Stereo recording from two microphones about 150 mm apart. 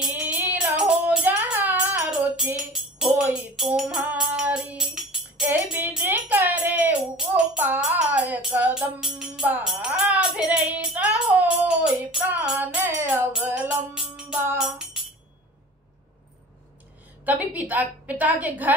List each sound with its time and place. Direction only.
0.0 s music: 10° right (ahead or behind)
5.8 s speech: 15° right (ahead or behind)
12.3 s music: 10° right (ahead or behind)
13.9 s music: 5° right (ahead or behind)
17.2 s a woman's voice: 10° right (ahead or behind)